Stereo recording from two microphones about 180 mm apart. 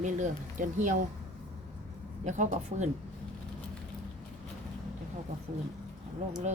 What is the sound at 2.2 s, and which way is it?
Speech, 40° right (ahead or behind).